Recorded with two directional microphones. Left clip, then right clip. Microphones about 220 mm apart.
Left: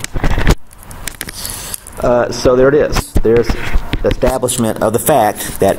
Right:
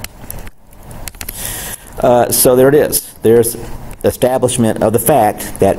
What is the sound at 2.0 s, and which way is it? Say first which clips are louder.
Speech: right 2 dB; 25° right (ahead or behind).